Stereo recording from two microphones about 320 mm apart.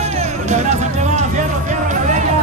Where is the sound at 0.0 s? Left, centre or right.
Centre.